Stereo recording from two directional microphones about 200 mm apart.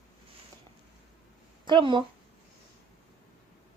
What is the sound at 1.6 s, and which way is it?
Speech, 25° right (ahead or behind).